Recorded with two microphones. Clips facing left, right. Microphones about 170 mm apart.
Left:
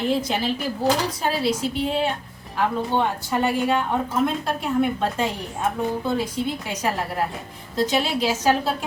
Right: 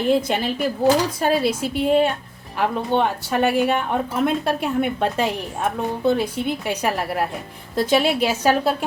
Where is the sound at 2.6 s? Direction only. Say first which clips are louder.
Right 2 dB; 70° right (ahead or behind).